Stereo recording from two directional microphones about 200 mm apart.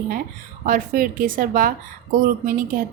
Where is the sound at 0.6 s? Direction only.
45° right (ahead or behind).